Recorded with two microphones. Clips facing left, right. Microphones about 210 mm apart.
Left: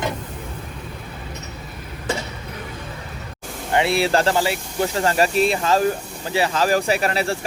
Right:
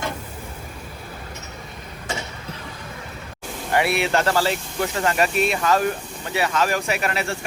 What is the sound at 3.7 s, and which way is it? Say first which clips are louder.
Speech: left 2 dB; 25° left (ahead or behind).